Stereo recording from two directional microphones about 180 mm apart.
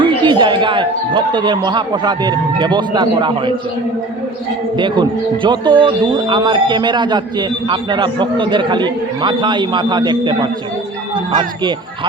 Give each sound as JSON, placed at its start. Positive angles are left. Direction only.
{"t": 0.0, "sound": "speech", "side_deg": -25}
{"t": 4.8, "sound": "speech", "side_deg": -25}